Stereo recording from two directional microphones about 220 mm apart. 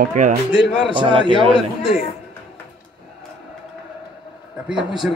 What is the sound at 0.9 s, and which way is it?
Speech, 20° right (ahead or behind).